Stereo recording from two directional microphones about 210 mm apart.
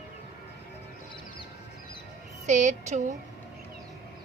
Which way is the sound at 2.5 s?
35° right (ahead or behind).